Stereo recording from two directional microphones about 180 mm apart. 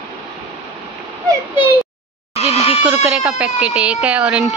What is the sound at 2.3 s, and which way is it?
Goat, 35° left (ahead or behind).